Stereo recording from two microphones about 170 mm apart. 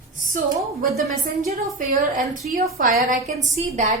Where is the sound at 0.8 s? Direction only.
50° right (ahead or behind).